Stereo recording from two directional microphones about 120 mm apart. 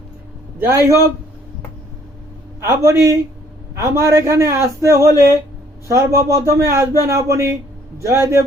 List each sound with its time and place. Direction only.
0.7 s a man's voice: 25° right (ahead or behind)
2.6 s a man's voice: 25° right (ahead or behind)